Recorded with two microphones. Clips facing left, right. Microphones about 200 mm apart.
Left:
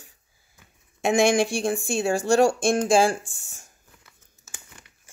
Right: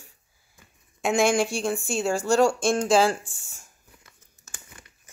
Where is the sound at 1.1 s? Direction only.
15° left (ahead or behind).